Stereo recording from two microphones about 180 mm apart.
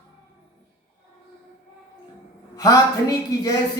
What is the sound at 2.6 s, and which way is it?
Speech, 20° left (ahead or behind).